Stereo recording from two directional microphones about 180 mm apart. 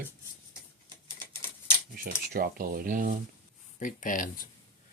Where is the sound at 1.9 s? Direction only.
55° right (ahead or behind).